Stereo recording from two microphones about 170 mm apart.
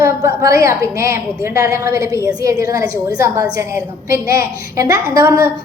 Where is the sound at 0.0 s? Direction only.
20° right (ahead or behind).